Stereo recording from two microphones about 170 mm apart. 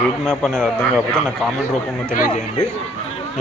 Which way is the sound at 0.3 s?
5° left (ahead or behind).